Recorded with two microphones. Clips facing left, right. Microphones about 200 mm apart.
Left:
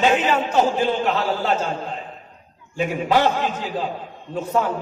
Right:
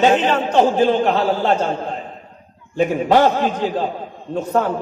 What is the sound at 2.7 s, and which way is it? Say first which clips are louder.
A man's voice: right 5 dB; 45° right (ahead or behind).